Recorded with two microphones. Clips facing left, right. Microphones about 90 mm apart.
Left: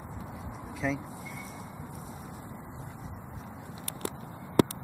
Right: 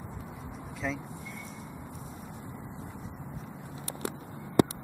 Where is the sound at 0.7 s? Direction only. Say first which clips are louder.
Left 3 dB; centre (ahead or behind).